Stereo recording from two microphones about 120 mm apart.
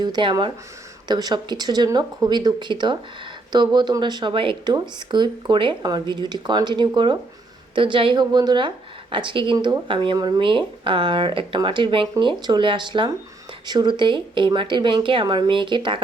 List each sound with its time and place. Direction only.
0.0 s speech: 40° right (ahead or behind)